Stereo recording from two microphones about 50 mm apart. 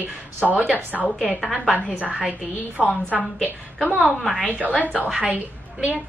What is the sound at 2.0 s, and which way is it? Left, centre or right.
Speech, right.